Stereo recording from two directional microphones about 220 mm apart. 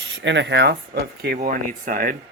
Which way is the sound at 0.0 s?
55° right (ahead or behind).